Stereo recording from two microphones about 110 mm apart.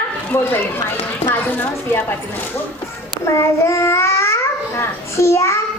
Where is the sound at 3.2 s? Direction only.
25° left (ahead or behind).